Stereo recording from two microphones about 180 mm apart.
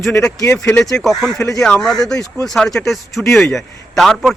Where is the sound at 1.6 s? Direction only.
5° left (ahead or behind).